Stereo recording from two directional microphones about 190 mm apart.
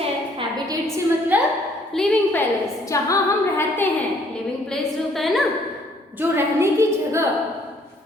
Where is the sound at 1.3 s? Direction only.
10° right (ahead or behind).